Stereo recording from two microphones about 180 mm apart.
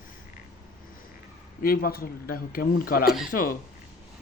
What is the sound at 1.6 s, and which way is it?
Speech, 55° left (ahead or behind).